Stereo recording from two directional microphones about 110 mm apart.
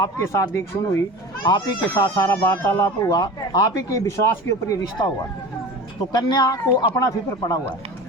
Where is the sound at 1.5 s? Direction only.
45° left (ahead or behind).